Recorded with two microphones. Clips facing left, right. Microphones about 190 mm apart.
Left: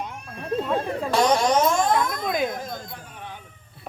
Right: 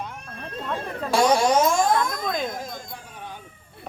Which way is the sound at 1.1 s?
10° right (ahead or behind).